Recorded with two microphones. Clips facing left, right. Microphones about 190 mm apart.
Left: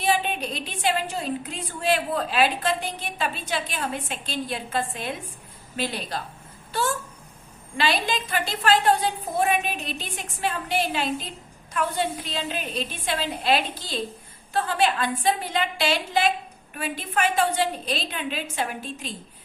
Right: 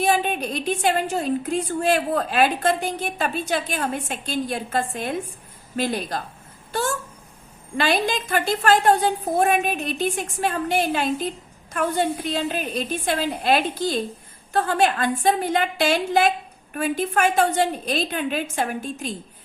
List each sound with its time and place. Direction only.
0.0 s a woman's voice: 45° right (ahead or behind)
6.7 s a sound: 45° right (ahead or behind)
7.8 s a woman's voice: 50° right (ahead or behind)